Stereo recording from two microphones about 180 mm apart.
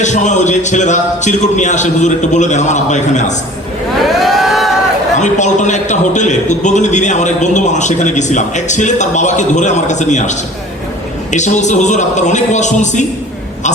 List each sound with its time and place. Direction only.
0.0 s a man's voice: 40° left (ahead or behind)
4.0 s vehicle: centre (ahead or behind)
5.1 s a man's voice: 40° left (ahead or behind)